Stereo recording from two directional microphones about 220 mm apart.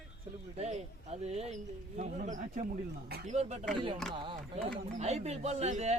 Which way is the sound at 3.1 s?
45° right (ahead or behind).